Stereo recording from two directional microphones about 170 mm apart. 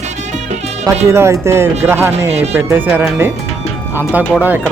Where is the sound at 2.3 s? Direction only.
40° right (ahead or behind).